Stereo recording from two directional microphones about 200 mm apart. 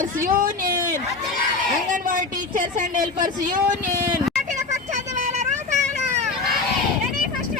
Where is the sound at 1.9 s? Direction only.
40° right (ahead or behind).